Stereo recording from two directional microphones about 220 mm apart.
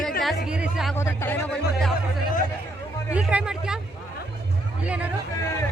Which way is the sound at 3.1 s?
5° right (ahead or behind).